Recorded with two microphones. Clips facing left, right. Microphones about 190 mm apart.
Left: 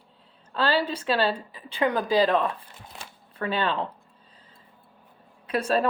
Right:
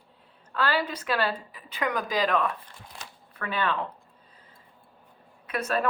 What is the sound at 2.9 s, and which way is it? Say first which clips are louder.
Shuffling cards: left 6 dB; 30° left (ahead or behind).